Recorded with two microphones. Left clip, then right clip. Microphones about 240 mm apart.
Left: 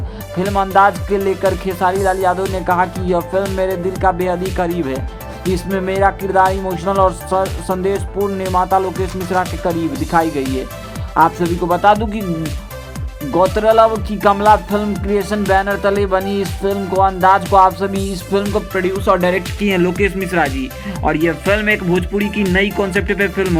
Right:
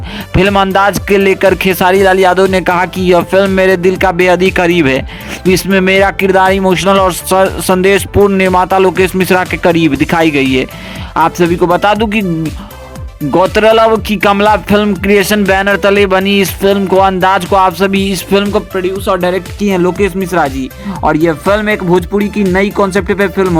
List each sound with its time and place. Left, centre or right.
0.3 s music: right
11.1 s speech: right
11.6 s music: right
13.3 s music: right
18.5 s speech: right